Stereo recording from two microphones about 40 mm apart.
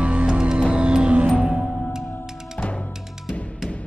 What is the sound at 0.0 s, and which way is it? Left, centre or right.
Music, right.